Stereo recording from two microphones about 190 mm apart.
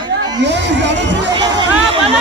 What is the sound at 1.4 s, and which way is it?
Speech, 25° right (ahead or behind).